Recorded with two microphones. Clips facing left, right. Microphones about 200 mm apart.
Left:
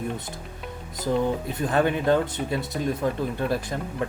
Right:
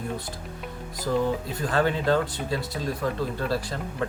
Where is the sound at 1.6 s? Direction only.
20° left (ahead or behind).